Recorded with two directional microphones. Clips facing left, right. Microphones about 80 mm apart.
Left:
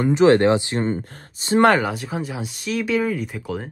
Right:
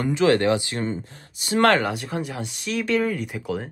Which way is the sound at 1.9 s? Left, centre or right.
Centre.